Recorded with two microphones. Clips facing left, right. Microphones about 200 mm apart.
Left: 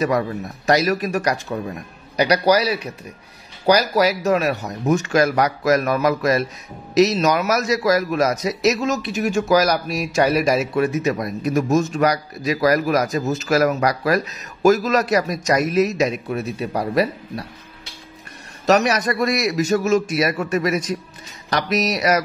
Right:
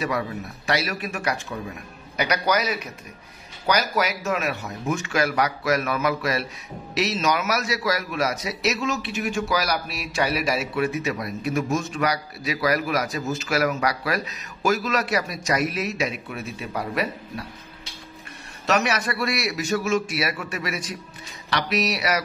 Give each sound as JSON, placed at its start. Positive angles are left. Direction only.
{"t": 0.7, "sound": "a man's voice", "side_deg": 40}
{"t": 18.7, "sound": "a man's voice", "side_deg": 40}